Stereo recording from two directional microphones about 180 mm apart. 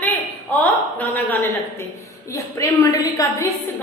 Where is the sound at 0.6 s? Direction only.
10° left (ahead or behind).